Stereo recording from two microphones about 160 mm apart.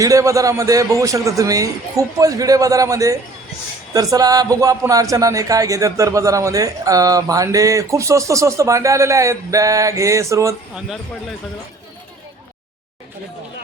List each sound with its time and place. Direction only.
0.0 s a man's voice: 20° right (ahead or behind)
10.8 s speech: centre (ahead or behind)